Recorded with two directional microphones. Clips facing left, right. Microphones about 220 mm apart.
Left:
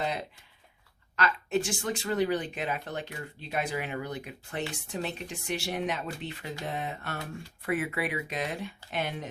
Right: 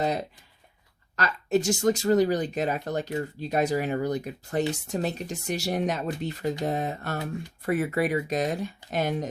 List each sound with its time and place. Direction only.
1.1 s speech: 40° right (ahead or behind)